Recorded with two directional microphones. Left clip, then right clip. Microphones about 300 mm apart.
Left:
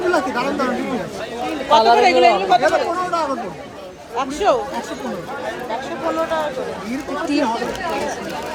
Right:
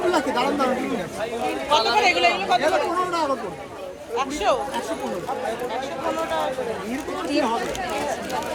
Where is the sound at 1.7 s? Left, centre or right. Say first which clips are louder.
Left 7 dB; left.